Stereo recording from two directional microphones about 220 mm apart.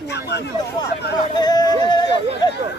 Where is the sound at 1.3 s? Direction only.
20° left (ahead or behind).